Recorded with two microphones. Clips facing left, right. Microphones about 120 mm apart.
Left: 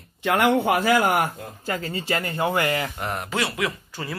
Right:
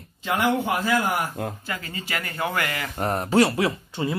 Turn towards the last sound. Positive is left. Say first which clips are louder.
# right 5 dB
turn(degrees=-25)  # may be behind; listen again after turning